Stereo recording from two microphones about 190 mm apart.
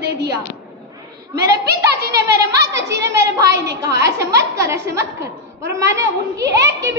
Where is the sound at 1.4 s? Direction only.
60° right (ahead or behind).